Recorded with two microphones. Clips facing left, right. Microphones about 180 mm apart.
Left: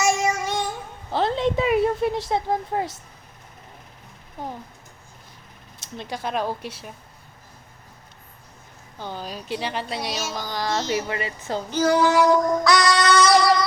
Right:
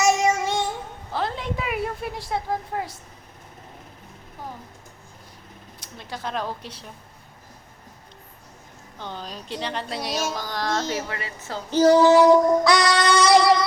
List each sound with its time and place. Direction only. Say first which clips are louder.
0.0 s child singing: right 2 dB; 20° right (ahead or behind)
1.1 s a sound: left 6 dB; 25° left (ahead or behind)
5.8 s speech: left 5 dB; 25° left (ahead or behind)
6.1 s a woman's voice: left 3 dB; 15° left (ahead or behind)
9.0 s speech: left 2 dB; 5° left (ahead or behind)
10.9 s a woman's voice: left 4 dB; 15° left (ahead or behind)
11.7 s child singing: right 5 dB; 35° right (ahead or behind)